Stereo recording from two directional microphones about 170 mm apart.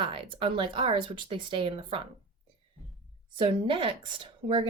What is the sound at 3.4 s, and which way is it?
Speech, 30° right (ahead or behind).